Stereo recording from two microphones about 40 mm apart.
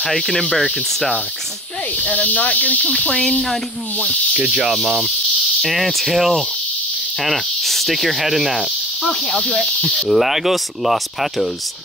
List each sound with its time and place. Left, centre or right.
0.0 s speech: centre
2.0 s speech: left
2.8 s speech: centre
4.5 s speech: centre
4.7 s speech: centre
9.0 s speech: centre